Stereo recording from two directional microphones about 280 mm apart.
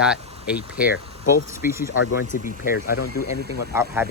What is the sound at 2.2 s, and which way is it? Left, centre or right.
Speech, left.